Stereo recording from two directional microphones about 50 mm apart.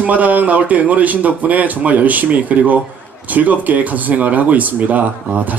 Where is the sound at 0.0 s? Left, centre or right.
Right.